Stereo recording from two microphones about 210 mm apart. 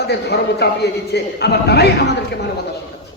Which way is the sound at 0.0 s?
50° left (ahead or behind).